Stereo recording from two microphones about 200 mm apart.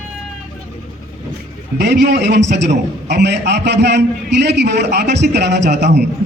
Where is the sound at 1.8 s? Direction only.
55° right (ahead or behind).